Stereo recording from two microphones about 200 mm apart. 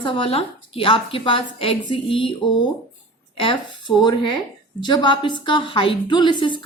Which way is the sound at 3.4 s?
25° left (ahead or behind).